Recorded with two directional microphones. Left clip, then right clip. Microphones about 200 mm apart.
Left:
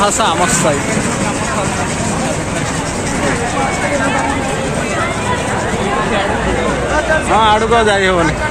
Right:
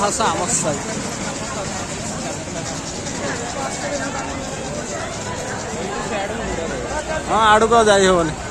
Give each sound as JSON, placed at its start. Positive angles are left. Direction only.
{"t": 0.0, "sound": "speech", "side_deg": 0}
{"t": 7.3, "sound": "speech", "side_deg": -35}